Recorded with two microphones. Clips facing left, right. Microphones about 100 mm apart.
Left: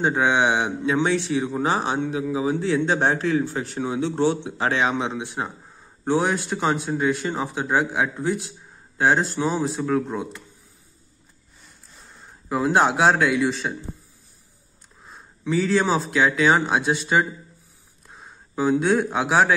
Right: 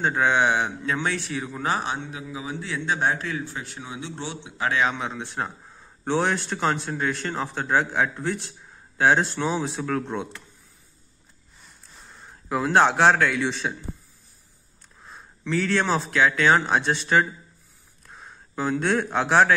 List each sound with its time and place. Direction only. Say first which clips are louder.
0.0 s a man's voice: left 1 dB; 20° left (ahead or behind); by 4.4 s 40° left (ahead or behind)
4.5 s a man's voice: left 2 dB; 30° left (ahead or behind)
4.8 s speech: left 3 dB; 20° left (ahead or behind); by 10.4 s centre (ahead or behind)
12.4 s speech: even; centre (ahead or behind)
15.4 s speech: left 3 dB; 5° left (ahead or behind)